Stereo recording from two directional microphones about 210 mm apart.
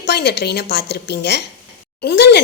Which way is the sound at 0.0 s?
50° left (ahead or behind).